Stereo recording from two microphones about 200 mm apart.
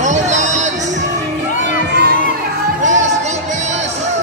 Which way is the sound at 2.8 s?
35° right (ahead or behind).